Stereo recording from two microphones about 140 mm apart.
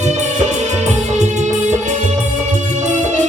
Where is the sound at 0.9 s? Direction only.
55° right (ahead or behind).